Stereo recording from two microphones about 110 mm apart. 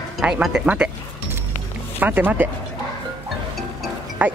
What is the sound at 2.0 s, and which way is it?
Speech, 15° right (ahead or behind).